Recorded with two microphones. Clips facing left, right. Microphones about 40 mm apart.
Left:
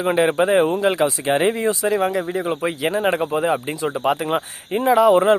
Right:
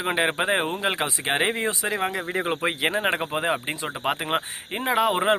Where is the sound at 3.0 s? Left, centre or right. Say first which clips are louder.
Left 5 dB; right.